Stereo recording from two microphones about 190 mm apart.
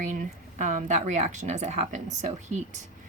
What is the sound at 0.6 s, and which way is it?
Speech, 40° right (ahead or behind).